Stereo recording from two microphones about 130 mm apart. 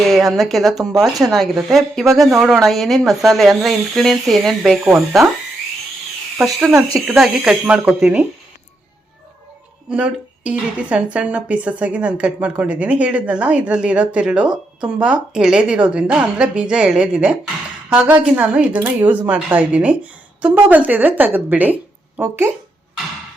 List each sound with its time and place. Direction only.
0.1 s speech: centre (ahead or behind)
6.4 s speech: centre (ahead or behind)
9.9 s speech: 10° right (ahead or behind)